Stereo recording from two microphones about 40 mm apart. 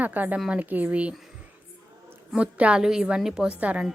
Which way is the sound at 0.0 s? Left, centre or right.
Right.